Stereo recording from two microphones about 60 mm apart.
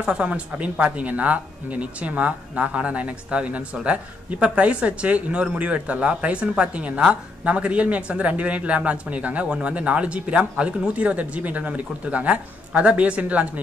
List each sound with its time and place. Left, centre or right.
0.0 s speech: centre